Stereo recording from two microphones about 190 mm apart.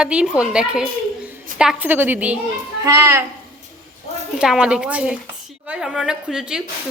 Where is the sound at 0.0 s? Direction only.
5° right (ahead or behind).